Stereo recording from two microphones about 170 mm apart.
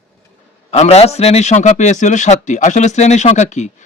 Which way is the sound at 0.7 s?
40° left (ahead or behind).